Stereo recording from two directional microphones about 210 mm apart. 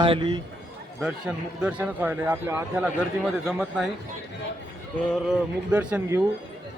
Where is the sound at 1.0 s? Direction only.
5° right (ahead or behind).